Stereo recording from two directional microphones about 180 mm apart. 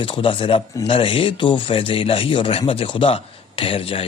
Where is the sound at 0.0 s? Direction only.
30° left (ahead or behind).